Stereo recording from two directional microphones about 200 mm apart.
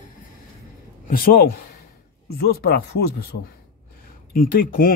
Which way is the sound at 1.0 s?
45° left (ahead or behind).